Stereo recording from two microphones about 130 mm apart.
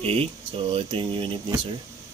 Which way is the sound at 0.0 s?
45° right (ahead or behind).